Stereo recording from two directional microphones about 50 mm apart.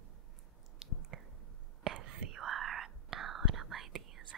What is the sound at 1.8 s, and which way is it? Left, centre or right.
Whispering, centre.